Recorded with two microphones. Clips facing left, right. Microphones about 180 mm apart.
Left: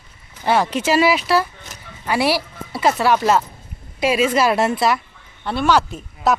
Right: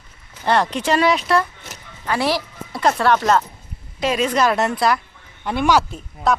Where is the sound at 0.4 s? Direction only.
5° left (ahead or behind).